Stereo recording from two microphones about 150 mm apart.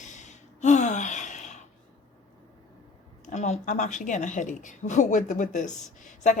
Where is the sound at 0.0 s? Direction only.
55° left (ahead or behind).